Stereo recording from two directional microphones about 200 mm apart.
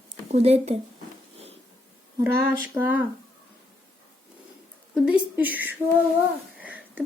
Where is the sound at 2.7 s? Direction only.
10° right (ahead or behind).